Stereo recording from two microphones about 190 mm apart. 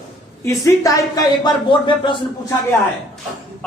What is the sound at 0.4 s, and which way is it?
A man's voice, 15° left (ahead or behind).